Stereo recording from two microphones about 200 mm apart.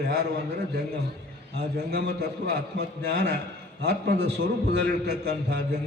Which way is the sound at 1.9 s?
55° right (ahead or behind).